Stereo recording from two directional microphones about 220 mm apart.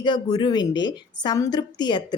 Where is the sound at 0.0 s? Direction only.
20° left (ahead or behind).